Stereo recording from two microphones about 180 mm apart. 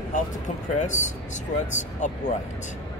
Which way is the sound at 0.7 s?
45° left (ahead or behind).